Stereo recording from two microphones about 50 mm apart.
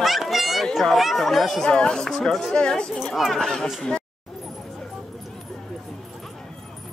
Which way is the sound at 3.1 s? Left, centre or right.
Centre.